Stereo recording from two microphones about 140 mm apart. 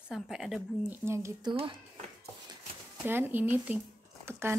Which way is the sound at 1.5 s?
35° right (ahead or behind).